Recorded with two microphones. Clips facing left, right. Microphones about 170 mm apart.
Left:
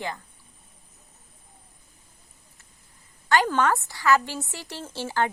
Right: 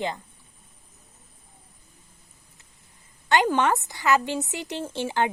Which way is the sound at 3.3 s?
20° right (ahead or behind).